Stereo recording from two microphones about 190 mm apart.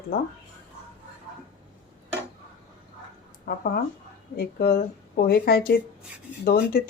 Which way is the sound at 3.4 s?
50° left (ahead or behind).